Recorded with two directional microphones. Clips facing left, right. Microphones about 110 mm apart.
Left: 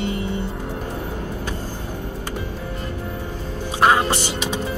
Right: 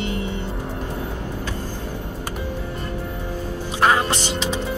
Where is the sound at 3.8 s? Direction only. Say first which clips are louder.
Left 2 dB; 15° left (ahead or behind).